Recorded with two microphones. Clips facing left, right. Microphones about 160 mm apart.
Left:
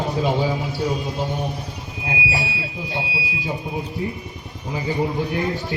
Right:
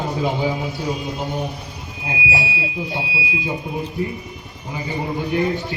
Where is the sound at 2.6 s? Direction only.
20° right (ahead or behind).